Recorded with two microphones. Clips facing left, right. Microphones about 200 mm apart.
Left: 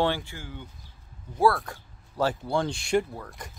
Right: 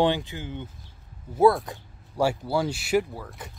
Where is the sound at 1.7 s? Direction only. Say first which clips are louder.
Right 3 dB; 10° right (ahead or behind).